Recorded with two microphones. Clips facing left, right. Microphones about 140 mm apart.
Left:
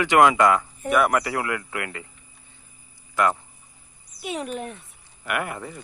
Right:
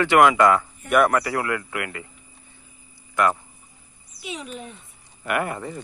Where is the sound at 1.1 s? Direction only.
20° left (ahead or behind).